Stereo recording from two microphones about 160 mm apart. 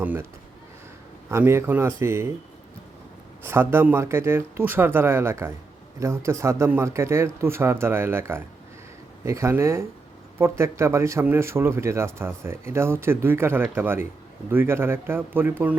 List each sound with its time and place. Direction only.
0.0 s speech: 10° right (ahead or behind)
1.3 s speech: 15° right (ahead or behind)
3.4 s speech: 15° right (ahead or behind)